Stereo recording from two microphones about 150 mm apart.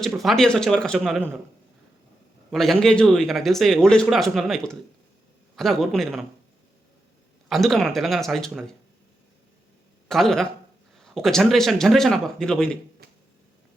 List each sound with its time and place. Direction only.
0.0 s speech: centre (ahead or behind)
2.5 s speech: centre (ahead or behind)
7.4 s speech: centre (ahead or behind)
10.1 s speech: centre (ahead or behind)
13.0 s finger snapping: 90° right